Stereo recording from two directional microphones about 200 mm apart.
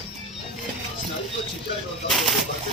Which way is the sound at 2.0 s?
Centre (ahead or behind).